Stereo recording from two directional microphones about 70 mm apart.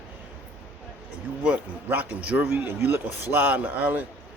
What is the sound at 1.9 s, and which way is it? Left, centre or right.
Speech, right.